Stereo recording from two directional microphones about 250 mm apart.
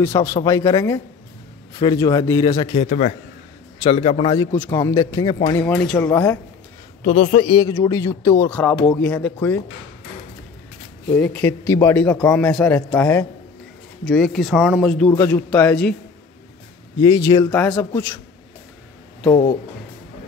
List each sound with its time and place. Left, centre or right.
0.0 s a man's voice: centre
2.9 s a man's voice: left
5.6 s a man's voice: centre
7.0 s a man's voice: left; by 9.6 s centre
11.1 s a man's voice: centre
17.0 s a man's voice: centre